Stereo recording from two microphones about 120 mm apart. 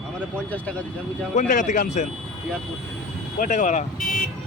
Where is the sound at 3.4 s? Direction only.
85° left.